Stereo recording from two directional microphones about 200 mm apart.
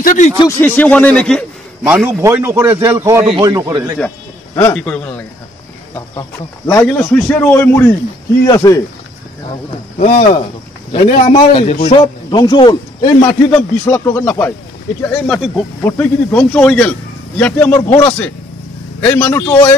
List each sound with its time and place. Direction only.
0.0 s speech: 40° left (ahead or behind)
0.4 s a man's voice: 10° left (ahead or behind)
1.9 s a man's voice: 10° right (ahead or behind)
4.6 s speech: 10° left (ahead or behind)
6.7 s speech: 15° left (ahead or behind)
9.9 s a man's voice: 35° left (ahead or behind)
13.5 s speech: 10° left (ahead or behind)